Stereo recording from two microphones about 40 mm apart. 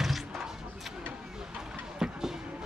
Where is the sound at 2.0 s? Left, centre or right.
Centre.